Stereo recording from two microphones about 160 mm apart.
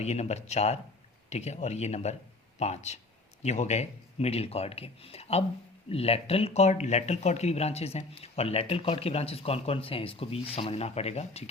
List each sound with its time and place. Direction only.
0.0 s speech: 45° left (ahead or behind)